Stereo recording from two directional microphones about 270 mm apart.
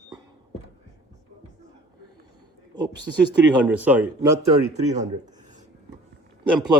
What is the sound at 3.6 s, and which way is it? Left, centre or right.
Speech, centre.